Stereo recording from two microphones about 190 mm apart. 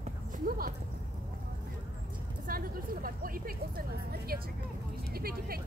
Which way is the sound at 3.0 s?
50° right (ahead or behind).